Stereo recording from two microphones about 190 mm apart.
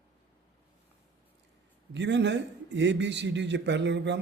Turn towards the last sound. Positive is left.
turn(degrees=-70)  # may be behind; listen again after turning